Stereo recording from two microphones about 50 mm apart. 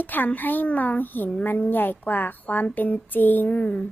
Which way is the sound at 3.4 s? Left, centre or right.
Left.